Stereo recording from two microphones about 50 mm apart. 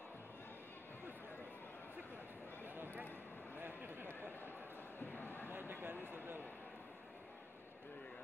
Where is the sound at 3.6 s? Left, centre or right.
Right.